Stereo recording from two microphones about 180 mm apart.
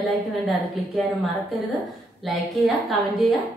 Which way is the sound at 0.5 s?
Centre (ahead or behind).